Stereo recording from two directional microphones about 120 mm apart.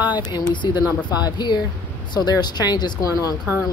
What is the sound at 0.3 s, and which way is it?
Speech, 35° left (ahead or behind).